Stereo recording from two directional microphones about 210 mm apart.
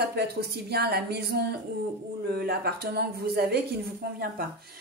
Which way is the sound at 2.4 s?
50° right (ahead or behind).